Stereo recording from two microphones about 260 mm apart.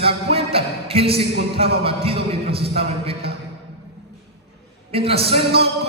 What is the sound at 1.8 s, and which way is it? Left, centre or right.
Speech, right.